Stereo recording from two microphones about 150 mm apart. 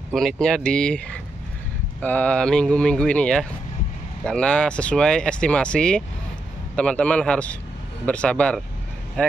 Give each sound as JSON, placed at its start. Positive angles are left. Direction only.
{"t": 0.1, "sound": "speech", "side_deg": 0}